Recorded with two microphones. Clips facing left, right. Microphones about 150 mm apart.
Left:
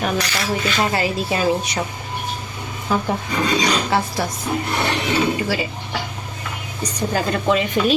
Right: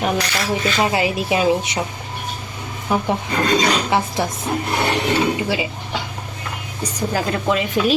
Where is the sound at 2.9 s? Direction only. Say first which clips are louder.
Right 1 dB; 20° right (ahead or behind).